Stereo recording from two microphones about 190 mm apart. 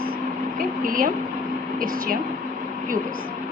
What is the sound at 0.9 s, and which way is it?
Speech, 45° right (ahead or behind).